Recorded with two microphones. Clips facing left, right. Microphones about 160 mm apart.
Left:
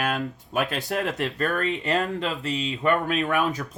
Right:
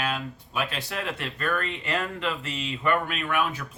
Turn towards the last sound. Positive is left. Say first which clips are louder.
# left 3 dB
turn(degrees=40)  # may be behind; listen again after turning